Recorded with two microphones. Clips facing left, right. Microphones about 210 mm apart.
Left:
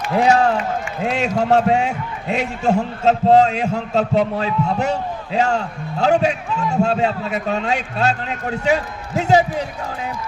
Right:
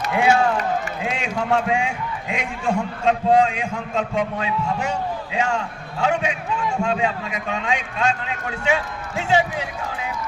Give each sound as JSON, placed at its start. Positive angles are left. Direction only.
{"t": 0.1, "sound": "a man's voice", "side_deg": 40}